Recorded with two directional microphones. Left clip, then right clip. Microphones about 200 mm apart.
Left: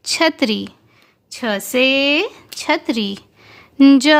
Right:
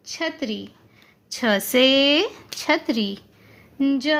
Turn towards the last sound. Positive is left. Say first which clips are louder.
# left 10 dB
turn(degrees=55)  # may be behind; listen again after turning